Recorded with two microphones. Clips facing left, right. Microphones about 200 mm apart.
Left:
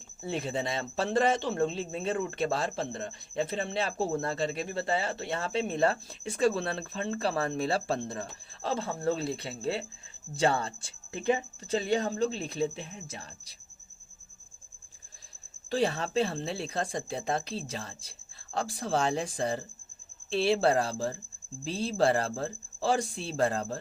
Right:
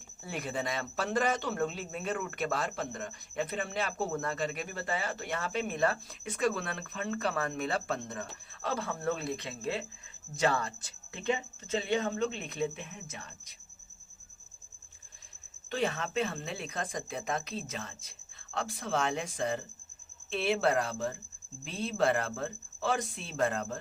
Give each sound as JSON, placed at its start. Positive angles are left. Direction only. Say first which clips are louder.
{"t": 0.2, "sound": "speech", "louder": "left 4 dB", "side_deg": 25}
{"t": 15.7, "sound": "speech", "louder": "left 4 dB", "side_deg": 35}